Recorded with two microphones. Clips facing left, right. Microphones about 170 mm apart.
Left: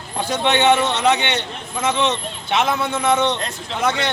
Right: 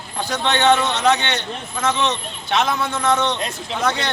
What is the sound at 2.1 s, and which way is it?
Speech, 10° left (ahead or behind).